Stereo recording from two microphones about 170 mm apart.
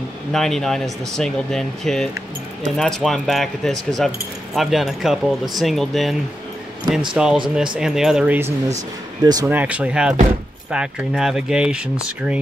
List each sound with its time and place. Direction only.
0.3 s speech: centre (ahead or behind)
7.2 s speech: 5° right (ahead or behind)
9.2 s speech: 25° right (ahead or behind)
9.5 s speech: 10° right (ahead or behind)